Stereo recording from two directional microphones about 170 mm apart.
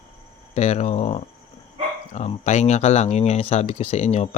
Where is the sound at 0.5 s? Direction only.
40° left (ahead or behind).